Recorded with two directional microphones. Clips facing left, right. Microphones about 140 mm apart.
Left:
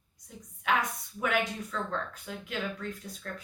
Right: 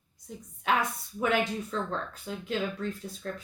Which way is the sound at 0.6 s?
30° right (ahead or behind).